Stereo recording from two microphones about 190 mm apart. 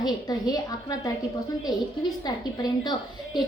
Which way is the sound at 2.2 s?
20° left (ahead or behind).